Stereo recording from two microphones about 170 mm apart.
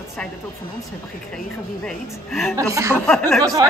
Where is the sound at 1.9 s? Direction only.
Centre (ahead or behind).